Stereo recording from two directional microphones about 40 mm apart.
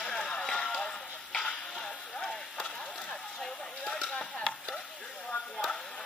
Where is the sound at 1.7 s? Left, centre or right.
Centre.